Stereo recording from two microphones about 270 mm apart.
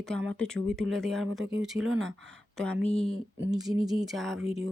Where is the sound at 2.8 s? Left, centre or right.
Left.